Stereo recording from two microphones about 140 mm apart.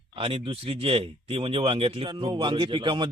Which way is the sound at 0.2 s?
40° right (ahead or behind).